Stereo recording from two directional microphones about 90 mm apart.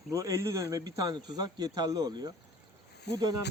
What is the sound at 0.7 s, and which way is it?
Speech, 45° right (ahead or behind).